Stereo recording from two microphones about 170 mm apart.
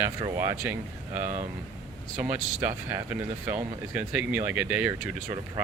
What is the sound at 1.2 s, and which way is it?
Speech, 40° right (ahead or behind).